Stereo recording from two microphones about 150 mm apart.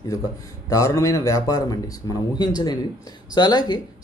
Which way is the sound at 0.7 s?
20° left (ahead or behind).